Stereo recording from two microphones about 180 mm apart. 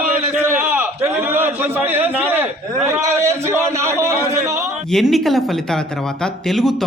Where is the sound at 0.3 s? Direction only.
10° right (ahead or behind).